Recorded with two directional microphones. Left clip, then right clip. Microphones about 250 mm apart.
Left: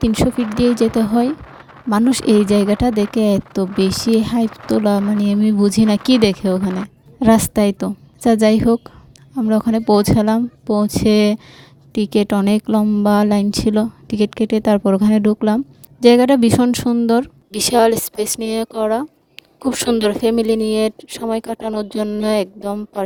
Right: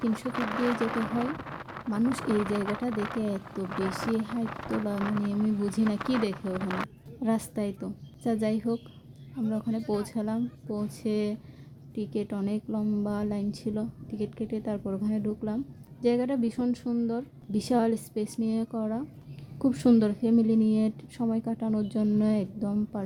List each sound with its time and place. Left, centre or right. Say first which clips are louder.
0.0 s a woman's voice: left 15 dB; left
1.9 s a woman's voice: left 14 dB; left